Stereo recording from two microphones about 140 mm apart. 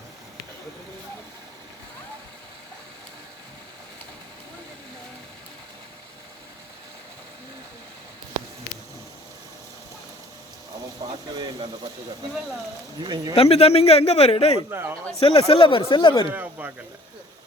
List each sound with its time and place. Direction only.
11.0 s a sound: 30° right (ahead or behind)
13.0 s speech: 35° right (ahead or behind)
13.3 s speech: 45° left (ahead or behind)
14.7 s speech: 15° right (ahead or behind)
15.2 s speech: 40° left (ahead or behind)
16.3 s a sound: 10° right (ahead or behind)